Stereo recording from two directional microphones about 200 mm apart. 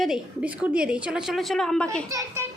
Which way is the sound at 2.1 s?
15° right (ahead or behind).